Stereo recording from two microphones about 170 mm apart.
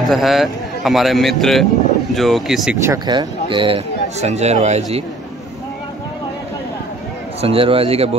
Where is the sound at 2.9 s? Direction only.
25° right (ahead or behind).